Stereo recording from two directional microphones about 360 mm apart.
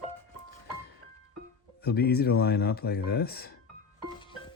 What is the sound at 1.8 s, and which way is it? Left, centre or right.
Speech, left.